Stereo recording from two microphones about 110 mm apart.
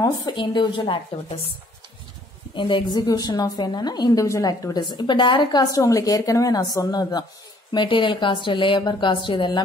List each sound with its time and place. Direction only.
0.0 s speech: 40° left (ahead or behind)
2.5 s a woman's voice: 45° left (ahead or behind)